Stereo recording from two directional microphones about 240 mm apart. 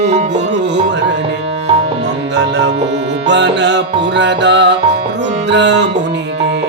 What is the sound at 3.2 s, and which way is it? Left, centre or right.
Music, right.